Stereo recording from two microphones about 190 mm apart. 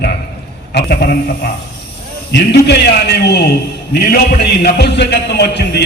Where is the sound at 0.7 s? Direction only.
55° left (ahead or behind).